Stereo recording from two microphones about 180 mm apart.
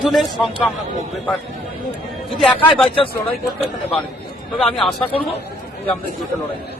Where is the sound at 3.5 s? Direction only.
35° left (ahead or behind).